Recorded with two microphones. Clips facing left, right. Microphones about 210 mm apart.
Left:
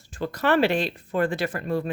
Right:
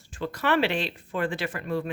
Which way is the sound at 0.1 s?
40° left (ahead or behind).